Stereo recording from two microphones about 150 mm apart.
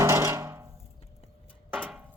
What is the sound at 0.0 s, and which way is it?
Hammer, 20° right (ahead or behind).